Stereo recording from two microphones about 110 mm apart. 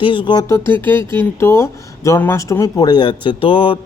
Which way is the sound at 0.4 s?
25° left (ahead or behind).